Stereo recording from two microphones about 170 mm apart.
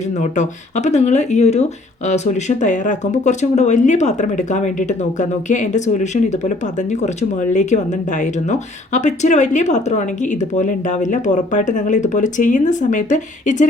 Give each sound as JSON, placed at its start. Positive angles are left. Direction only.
{"t": 0.2, "sound": "speech", "side_deg": 45}